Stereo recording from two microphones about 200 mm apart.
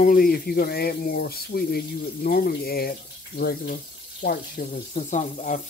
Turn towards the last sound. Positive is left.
turn(degrees=40)  # may be behind; listen again after turning